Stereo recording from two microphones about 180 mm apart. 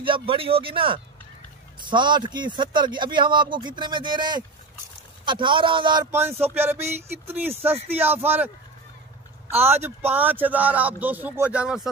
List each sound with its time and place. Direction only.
0.0 s speech: 30° right (ahead or behind)
6.1 s a man's voice: 15° right (ahead or behind)
9.5 s a man's voice: 10° right (ahead or behind)